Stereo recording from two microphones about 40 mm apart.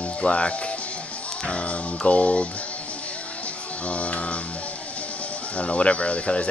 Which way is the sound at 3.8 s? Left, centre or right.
Left.